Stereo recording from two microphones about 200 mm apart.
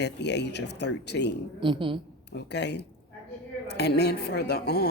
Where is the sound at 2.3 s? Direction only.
55° left (ahead or behind).